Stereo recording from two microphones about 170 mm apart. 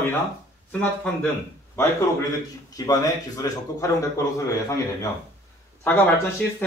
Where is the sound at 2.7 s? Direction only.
20° left (ahead or behind).